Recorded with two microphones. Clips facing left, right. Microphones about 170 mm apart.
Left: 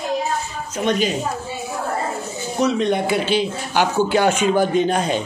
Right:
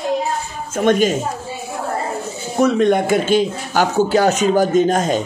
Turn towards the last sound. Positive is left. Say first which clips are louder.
# right 3 dB
turn(degrees=-40)  # may be behind; listen again after turning